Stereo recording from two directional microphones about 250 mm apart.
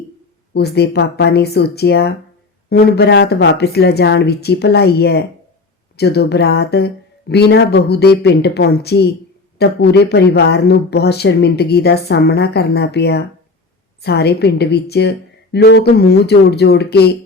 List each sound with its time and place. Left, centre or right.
0.5 s speech: left